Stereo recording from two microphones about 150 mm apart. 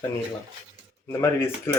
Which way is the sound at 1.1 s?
15° left (ahead or behind).